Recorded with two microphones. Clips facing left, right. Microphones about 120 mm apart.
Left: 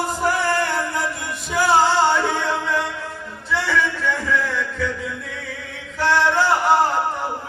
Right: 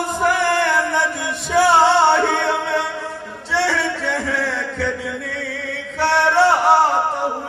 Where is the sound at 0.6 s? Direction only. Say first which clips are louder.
Right 4 dB; 85° right.